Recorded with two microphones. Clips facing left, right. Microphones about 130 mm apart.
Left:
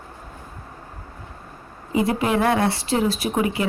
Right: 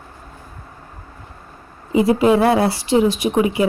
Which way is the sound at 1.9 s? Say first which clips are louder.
Right 7 dB; 25° right (ahead or behind).